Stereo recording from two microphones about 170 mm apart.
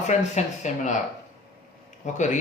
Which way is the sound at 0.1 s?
45° left (ahead or behind).